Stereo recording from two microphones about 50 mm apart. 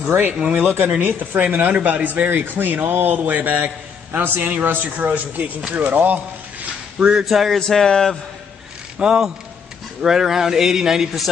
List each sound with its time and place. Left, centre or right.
0.4 s speech: right
0.8 s speech: right
7.0 s speech: centre
7.2 s music: centre
7.5 s speech: centre
8.9 s a man's voice: centre